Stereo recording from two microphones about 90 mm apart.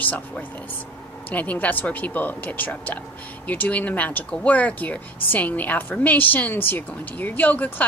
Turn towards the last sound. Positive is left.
turn(degrees=20)  # may be behind; listen again after turning